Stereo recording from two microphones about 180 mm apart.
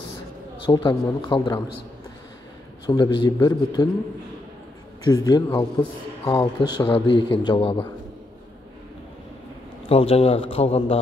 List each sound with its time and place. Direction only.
0.7 s speech: 25° left (ahead or behind)
2.9 s speech: 25° left (ahead or behind)
5.0 s speech: 20° left (ahead or behind)
9.8 s a man's voice: 35° left (ahead or behind)